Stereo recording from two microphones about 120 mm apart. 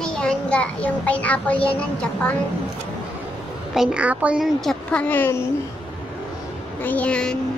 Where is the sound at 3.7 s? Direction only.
5° right (ahead or behind).